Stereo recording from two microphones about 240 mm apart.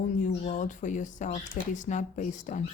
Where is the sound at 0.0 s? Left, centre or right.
Left.